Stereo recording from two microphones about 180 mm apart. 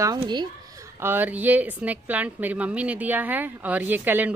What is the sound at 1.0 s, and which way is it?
Speech, 10° right (ahead or behind).